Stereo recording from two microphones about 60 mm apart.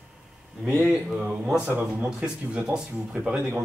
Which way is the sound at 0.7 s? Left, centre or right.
Right.